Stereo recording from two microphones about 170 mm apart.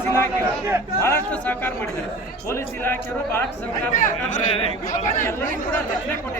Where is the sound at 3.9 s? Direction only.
50° left (ahead or behind).